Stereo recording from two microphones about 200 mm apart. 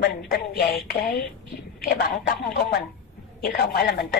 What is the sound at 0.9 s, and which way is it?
A woman's voice, 50° left (ahead or behind).